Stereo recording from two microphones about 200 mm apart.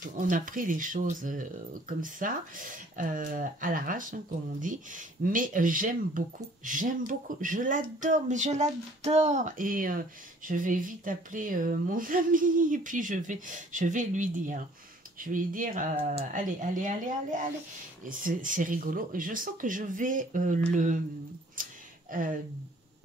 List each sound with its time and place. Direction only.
0.0 s speech: 40° right (ahead or behind)
21.6 s a sound: 45° right (ahead or behind)
22.1 s speech: 40° right (ahead or behind)